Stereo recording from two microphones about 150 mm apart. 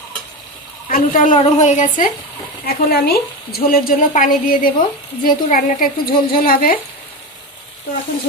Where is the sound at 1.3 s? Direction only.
50° left (ahead or behind).